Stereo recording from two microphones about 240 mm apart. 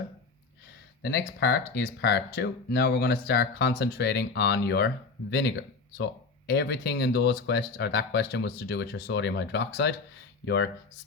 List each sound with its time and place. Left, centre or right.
1.0 s speech: left